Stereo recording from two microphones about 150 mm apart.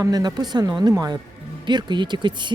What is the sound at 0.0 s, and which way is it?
Speech, 25° right (ahead or behind).